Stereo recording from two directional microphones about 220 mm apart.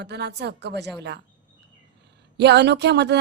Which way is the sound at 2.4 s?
50° right (ahead or behind).